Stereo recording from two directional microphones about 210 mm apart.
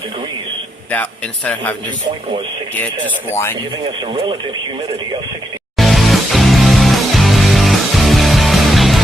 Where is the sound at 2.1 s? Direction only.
25° right (ahead or behind).